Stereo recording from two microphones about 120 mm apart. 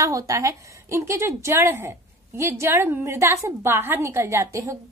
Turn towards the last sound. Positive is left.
turn(degrees=-25)  # may be behind; listen again after turning